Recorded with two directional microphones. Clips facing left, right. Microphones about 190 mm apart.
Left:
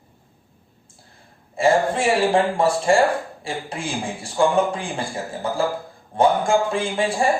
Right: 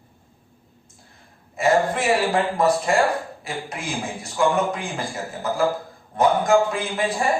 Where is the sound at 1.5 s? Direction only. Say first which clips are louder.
Left 1 dB; 30° left (ahead or behind).